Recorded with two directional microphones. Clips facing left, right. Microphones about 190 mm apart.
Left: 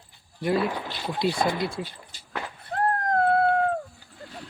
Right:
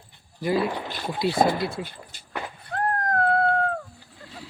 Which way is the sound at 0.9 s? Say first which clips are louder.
Right 1 dB; 50° right (ahead or behind).